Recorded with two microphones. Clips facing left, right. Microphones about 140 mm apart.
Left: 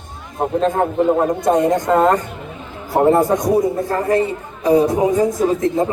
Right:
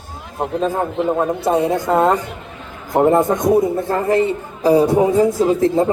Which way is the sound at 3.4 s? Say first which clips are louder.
Right 1 dB; 25° right (ahead or behind).